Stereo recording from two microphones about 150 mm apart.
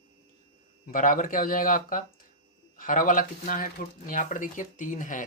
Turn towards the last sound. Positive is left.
turn(degrees=60)  # may be behind; listen again after turning